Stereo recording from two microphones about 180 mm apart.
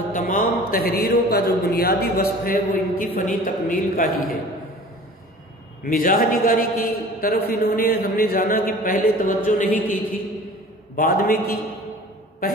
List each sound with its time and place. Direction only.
0.1 s a man's voice: 50° left (ahead or behind)
5.9 s a man's voice: 50° left (ahead or behind)
11.0 s a man's voice: 50° left (ahead or behind)